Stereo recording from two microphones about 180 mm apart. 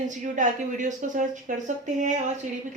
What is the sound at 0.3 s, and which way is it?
Speech, 45° right (ahead or behind).